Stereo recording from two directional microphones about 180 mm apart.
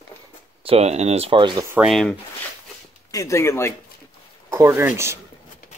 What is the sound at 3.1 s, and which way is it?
Speech, 15° left (ahead or behind).